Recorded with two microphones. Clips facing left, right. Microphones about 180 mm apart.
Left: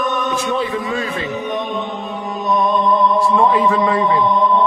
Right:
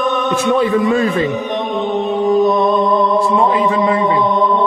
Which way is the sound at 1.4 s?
30° right (ahead or behind).